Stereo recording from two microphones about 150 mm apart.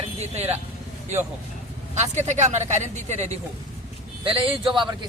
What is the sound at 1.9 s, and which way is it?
Speech, 50° right (ahead or behind).